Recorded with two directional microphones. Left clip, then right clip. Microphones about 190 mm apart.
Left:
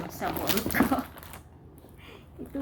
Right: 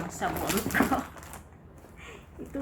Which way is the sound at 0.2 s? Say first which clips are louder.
Even; 15° left (ahead or behind).